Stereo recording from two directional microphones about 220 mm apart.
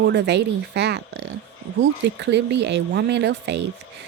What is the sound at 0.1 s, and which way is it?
Speech, 50° right (ahead or behind).